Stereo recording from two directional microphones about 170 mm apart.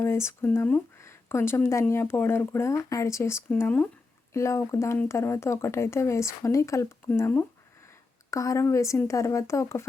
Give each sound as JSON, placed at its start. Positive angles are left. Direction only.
{"t": 0.0, "sound": "speech", "side_deg": 15}